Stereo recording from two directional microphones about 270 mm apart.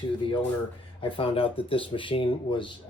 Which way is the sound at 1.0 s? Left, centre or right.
Centre.